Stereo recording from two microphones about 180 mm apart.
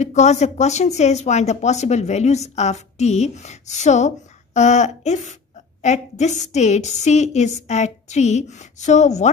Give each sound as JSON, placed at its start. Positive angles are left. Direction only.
{"t": 0.0, "sound": "speech", "side_deg": 40}